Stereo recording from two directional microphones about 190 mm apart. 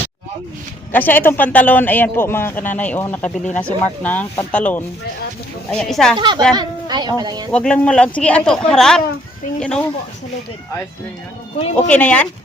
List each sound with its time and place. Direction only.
0.9 s a man's voice: 10° left (ahead or behind)
6.1 s a woman's voice: 25° right (ahead or behind)
7.5 s speech: 5° left (ahead or behind)
11.9 s a man's voice: 5° left (ahead or behind)